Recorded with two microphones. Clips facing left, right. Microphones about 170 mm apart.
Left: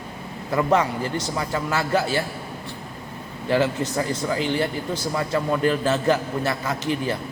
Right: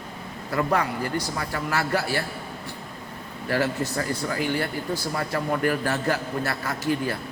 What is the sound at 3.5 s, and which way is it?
A man's voice, 20° left (ahead or behind).